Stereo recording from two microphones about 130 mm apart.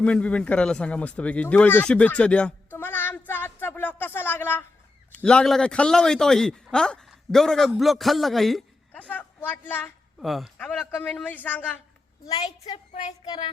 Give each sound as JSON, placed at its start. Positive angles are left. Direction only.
{"t": 0.0, "sound": "a man's voice", "side_deg": 10}
{"t": 10.2, "sound": "speech", "side_deg": 0}
{"t": 12.9, "sound": "speech", "side_deg": 60}
{"t": 13.2, "sound": "child singing", "side_deg": 35}